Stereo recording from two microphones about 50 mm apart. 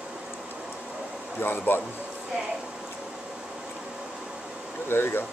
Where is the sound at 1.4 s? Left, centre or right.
Left.